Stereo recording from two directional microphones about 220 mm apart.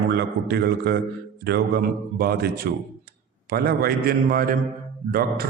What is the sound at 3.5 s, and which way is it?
A man's voice, 45° right (ahead or behind).